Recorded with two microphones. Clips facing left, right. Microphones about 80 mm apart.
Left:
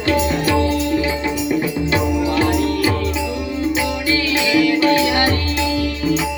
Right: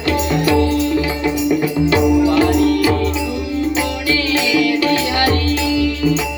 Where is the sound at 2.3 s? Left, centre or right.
Left.